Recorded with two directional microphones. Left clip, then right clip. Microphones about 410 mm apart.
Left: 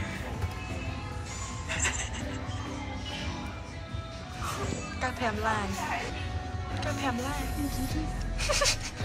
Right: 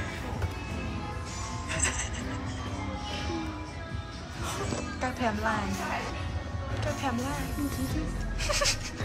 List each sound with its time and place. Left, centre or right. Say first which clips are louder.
1.7 s music: even; centre
5.0 s speech: even; centre
6.8 s speech: even; centre
8.4 s music: left 1 dB; centre